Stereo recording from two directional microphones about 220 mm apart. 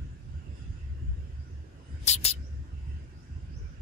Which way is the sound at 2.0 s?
30° left (ahead or behind).